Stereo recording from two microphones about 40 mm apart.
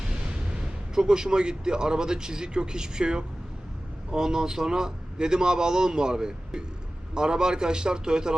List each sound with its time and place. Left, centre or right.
0.0 s a man's voice: centre